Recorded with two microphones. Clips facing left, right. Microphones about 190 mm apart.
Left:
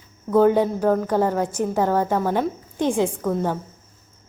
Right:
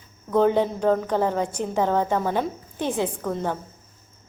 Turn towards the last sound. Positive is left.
turn(degrees=10)  # may be behind; listen again after turning